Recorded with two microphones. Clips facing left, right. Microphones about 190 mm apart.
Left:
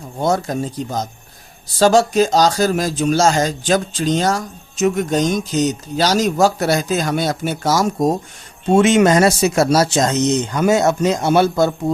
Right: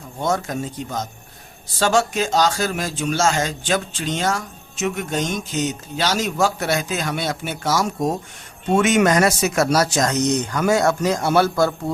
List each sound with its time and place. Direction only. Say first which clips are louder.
0.2 s a man's voice: left 4 dB; 35° left (ahead or behind)
8.7 s speech: left 4 dB; 30° left (ahead or behind)